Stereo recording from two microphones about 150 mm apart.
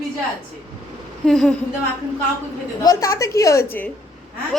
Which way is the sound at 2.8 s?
20° left (ahead or behind).